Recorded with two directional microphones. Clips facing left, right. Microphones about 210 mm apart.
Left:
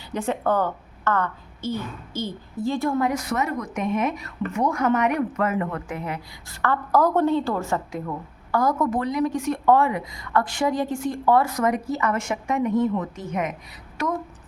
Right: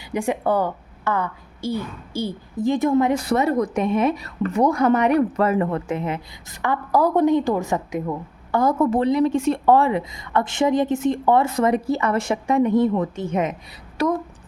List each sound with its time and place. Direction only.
0.0 s a woman's voice: 15° right (ahead or behind); by 14.1 s 35° right (ahead or behind)